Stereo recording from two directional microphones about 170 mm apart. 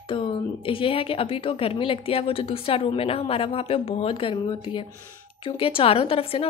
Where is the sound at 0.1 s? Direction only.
30° left (ahead or behind).